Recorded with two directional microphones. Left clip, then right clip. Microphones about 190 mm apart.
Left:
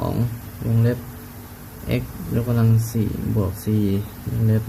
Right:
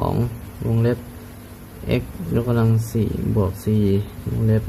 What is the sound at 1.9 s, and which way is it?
Speech, 25° right (ahead or behind).